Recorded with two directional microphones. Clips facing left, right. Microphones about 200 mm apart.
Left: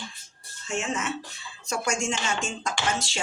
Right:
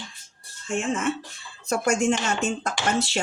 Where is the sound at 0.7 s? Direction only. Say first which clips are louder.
Right 4 dB; 50° right (ahead or behind).